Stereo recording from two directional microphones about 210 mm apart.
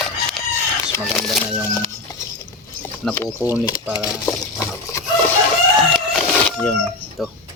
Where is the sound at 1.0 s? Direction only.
Centre (ahead or behind).